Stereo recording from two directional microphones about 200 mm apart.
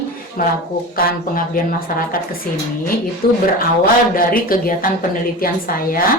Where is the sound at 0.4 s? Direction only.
45° left (ahead or behind).